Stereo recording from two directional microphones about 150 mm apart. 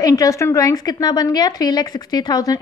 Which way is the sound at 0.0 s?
25° left (ahead or behind).